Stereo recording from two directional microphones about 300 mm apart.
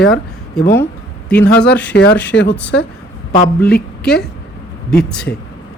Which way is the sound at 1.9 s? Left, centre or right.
Left.